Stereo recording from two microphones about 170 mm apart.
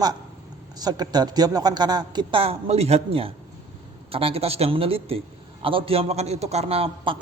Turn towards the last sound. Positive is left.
turn(degrees=-30)  # may be behind; listen again after turning